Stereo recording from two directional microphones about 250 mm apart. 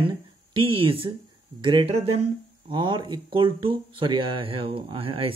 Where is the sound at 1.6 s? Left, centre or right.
Centre.